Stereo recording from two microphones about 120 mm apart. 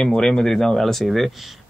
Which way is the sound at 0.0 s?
5° left (ahead or behind).